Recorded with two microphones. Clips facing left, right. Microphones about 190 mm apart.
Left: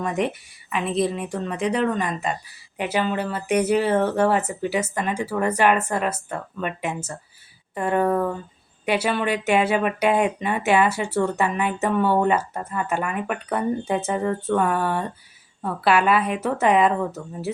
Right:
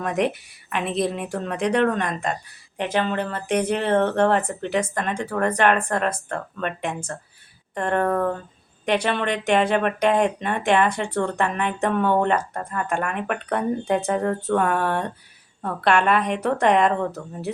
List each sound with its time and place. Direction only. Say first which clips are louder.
0.0 s speech: right 1 dB; centre (ahead or behind)